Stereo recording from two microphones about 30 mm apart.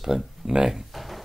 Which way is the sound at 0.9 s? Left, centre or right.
Centre.